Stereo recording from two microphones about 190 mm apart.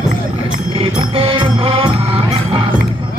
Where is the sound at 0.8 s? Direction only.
30° right (ahead or behind).